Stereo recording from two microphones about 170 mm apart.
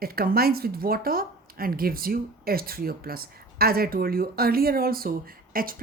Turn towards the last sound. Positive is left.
turn(degrees=-60)  # may be behind; listen again after turning